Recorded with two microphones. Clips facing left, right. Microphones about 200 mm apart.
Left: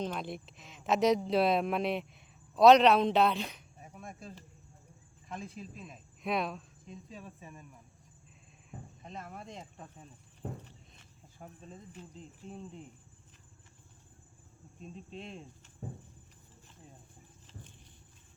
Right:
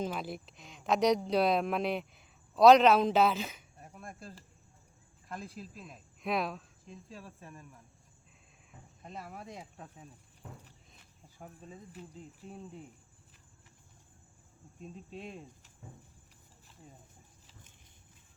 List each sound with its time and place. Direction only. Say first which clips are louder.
0.0 s speech: even; 5° right (ahead or behind)
9.0 s speech: right 1 dB; 5° right (ahead or behind)
10.4 s walk: left 9 dB; 40° left (ahead or behind)
10.9 s speech: even; 5° right (ahead or behind)
14.8 s speech: even; 5° right (ahead or behind)